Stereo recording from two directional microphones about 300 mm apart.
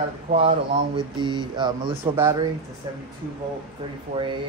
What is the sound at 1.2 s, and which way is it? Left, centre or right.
Speech, centre.